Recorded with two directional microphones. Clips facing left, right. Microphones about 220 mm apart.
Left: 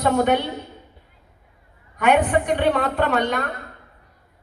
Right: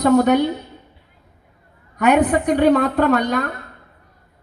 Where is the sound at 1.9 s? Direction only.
40° right (ahead or behind).